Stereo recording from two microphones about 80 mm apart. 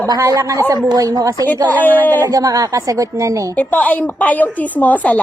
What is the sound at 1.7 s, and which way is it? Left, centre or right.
Speech, left.